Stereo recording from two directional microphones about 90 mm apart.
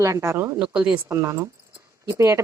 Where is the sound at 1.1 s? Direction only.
30° right (ahead or behind).